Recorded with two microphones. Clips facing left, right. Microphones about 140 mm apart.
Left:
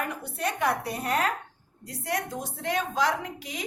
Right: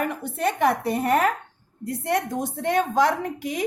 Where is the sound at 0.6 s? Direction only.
60° right (ahead or behind).